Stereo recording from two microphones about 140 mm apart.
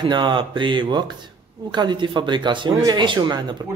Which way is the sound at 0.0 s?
35° right (ahead or behind).